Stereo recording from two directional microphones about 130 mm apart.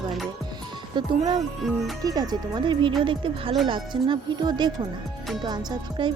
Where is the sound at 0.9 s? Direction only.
35° right (ahead or behind).